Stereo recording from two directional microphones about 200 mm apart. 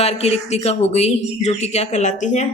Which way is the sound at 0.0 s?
30° left (ahead or behind).